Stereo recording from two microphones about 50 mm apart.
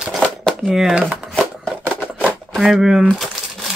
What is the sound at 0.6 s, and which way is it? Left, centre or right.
Speech, centre.